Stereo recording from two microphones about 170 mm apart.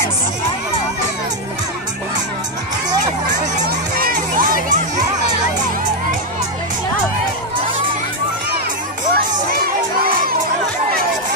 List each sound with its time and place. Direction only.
3.6 s music: 55° right (ahead or behind)
9.1 s music: 55° right (ahead or behind)